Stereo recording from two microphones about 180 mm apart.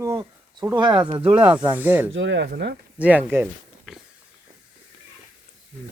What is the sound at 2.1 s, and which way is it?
Speech, 90° right.